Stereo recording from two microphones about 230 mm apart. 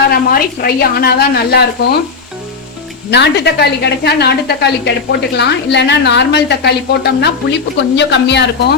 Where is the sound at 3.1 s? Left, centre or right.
Left.